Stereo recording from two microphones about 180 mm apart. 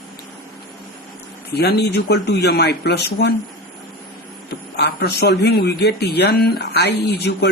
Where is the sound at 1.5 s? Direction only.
65° left (ahead or behind).